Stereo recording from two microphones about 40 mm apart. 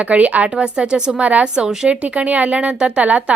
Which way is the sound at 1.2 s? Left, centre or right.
Right.